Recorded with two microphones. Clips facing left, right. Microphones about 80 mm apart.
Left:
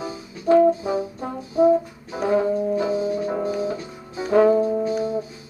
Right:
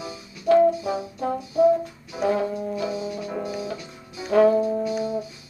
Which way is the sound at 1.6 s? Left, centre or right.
Left.